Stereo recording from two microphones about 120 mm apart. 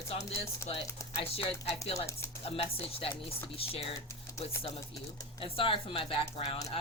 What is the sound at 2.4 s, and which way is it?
Speech, 50° left (ahead or behind).